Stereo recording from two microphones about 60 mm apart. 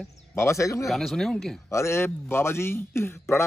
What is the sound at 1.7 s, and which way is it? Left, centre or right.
Speech, left.